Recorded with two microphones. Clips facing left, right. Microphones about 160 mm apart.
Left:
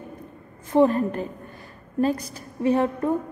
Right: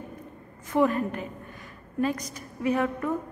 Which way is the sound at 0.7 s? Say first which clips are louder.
Left 5 dB; 30° left (ahead or behind).